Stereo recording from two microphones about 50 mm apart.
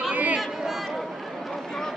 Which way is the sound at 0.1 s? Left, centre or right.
Right.